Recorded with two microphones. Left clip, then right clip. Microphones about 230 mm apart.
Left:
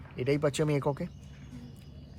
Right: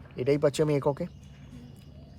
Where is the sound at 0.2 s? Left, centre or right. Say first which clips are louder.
Right 4 dB; centre.